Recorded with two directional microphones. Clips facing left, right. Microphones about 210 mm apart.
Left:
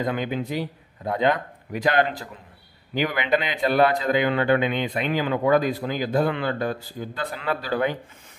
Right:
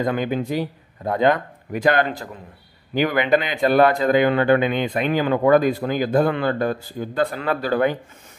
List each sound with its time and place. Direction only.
0.0 s speech: 50° right (ahead or behind)